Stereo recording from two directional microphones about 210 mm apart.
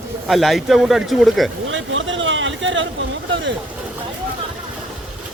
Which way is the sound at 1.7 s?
65° right (ahead or behind).